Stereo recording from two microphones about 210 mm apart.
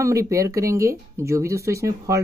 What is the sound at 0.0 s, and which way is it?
Speech, 15° right (ahead or behind).